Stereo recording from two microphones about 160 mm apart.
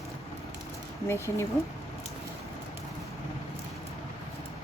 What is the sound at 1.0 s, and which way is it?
Speech, 15° left (ahead or behind).